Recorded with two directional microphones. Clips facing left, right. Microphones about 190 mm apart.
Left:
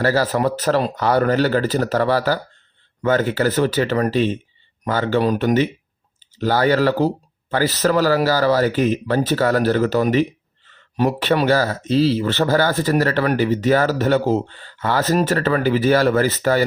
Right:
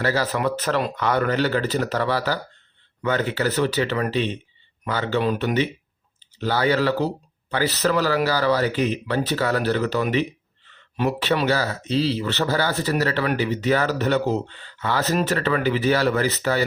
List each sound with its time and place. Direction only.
0.0 s speech: 40° left (ahead or behind)